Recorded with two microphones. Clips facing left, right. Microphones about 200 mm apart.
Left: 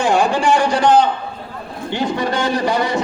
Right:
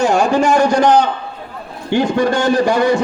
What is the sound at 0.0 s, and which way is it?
A man's voice, 40° right (ahead or behind).